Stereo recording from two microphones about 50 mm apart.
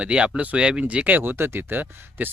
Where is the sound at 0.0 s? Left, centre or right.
Right.